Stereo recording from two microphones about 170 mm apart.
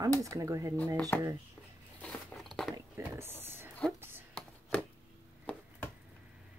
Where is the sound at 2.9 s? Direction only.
15° right (ahead or behind).